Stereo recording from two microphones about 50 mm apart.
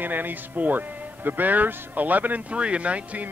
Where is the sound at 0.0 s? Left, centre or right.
Right.